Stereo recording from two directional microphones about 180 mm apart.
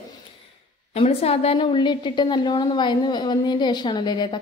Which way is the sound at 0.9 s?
35° left (ahead or behind).